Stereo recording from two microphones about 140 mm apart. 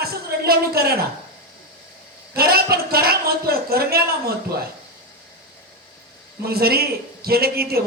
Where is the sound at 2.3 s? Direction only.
90° right.